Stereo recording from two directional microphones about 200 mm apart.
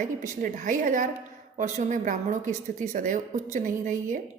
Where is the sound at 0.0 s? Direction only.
40° right (ahead or behind).